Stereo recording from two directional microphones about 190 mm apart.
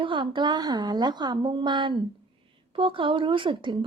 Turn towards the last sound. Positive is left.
turn(degrees=-25)  # may be behind; listen again after turning